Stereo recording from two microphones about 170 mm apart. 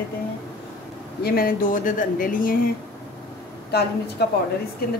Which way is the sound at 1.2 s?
60° left (ahead or behind).